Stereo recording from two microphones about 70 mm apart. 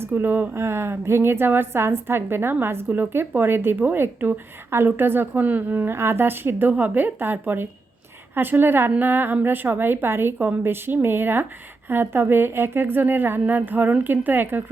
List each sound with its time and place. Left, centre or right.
0.0 s a woman's voice: right
0.5 s a woman's voice: right